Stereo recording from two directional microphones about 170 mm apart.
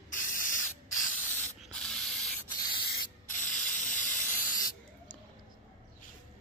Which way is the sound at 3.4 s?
50° left (ahead or behind).